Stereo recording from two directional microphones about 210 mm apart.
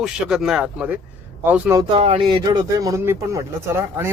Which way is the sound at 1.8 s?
25° right (ahead or behind).